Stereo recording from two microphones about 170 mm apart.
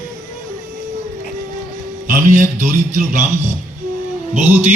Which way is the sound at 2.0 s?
45° right (ahead or behind).